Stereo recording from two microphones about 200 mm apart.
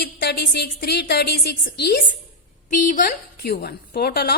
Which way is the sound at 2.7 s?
40° left (ahead or behind).